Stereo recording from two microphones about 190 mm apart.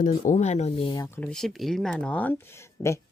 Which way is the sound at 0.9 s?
15° left (ahead or behind).